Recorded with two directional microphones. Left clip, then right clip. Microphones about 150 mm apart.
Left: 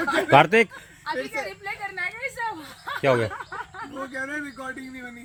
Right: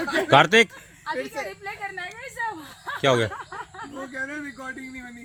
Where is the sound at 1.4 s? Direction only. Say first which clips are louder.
Left 1 dB; 35° left (ahead or behind).